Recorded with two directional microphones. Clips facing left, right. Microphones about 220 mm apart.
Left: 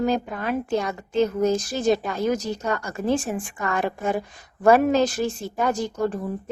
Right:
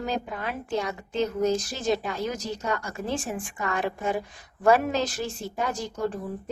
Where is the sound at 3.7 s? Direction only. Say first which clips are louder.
Left 3 dB; 45° left (ahead or behind).